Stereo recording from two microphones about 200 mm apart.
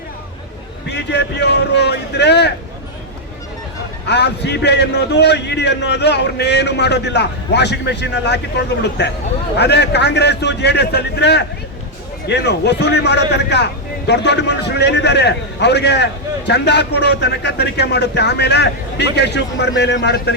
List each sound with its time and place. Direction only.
0.9 s a man's voice: 60° left (ahead or behind)
4.0 s a man's voice: 55° left (ahead or behind)